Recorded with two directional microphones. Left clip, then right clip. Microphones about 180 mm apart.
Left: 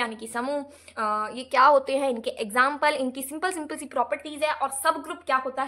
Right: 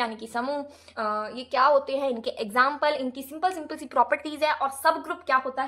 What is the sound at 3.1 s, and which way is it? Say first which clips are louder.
Speech: right 2 dB; 30° left (ahead or behind).